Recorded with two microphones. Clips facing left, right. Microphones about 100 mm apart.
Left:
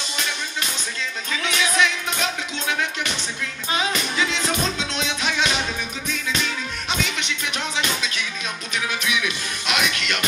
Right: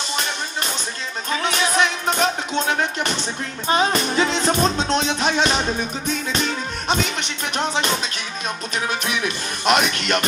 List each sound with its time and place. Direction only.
0.1 s music: 40° right (ahead or behind)